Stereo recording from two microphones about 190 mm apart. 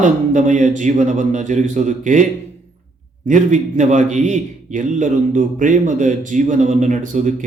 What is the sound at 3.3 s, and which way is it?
A man's voice, 40° right (ahead or behind).